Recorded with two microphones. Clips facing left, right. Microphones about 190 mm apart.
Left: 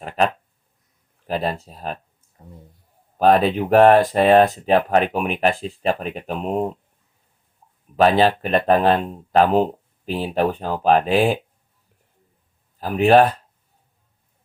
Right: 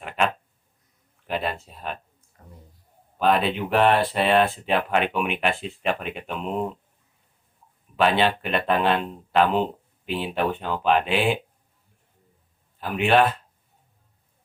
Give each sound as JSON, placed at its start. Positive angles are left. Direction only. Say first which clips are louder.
{"t": 1.3, "sound": "speech", "louder": "left 4 dB", "side_deg": 40}
{"t": 3.2, "sound": "speech", "louder": "left 6 dB", "side_deg": 40}
{"t": 7.9, "sound": "speech", "louder": "left 5 dB", "side_deg": 40}
{"t": 12.8, "sound": "speech", "louder": "left 6 dB", "side_deg": 40}